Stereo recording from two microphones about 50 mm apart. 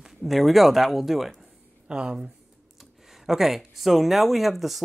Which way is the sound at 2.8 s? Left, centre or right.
Centre.